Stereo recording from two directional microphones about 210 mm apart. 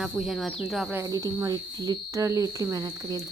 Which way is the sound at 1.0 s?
15° right (ahead or behind).